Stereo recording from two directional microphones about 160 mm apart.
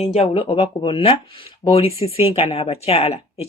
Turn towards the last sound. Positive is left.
turn(degrees=40)  # may be behind; listen again after turning